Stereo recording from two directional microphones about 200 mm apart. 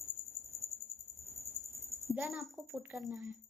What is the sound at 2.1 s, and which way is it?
A woman's voice, centre (ahead or behind).